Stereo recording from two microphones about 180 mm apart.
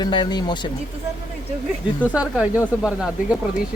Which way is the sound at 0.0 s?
25° left (ahead or behind).